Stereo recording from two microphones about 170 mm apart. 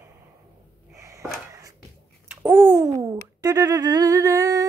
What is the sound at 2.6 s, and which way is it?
Humming, 15° right (ahead or behind).